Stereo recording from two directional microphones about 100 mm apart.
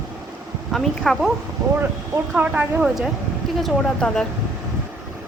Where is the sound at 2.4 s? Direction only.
15° right (ahead or behind).